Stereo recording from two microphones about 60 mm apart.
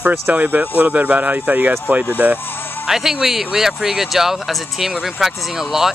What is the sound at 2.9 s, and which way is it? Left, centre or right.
Speech, centre.